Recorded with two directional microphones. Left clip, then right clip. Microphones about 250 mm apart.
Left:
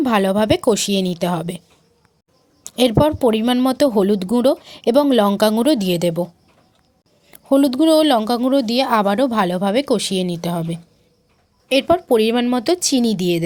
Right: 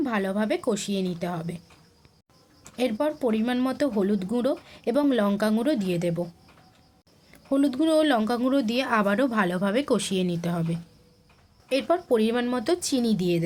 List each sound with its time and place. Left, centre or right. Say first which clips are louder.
0.0 s speech: left 10 dB; left
2.6 s speech: left 11 dB; left
7.3 s speech: left 9 dB; left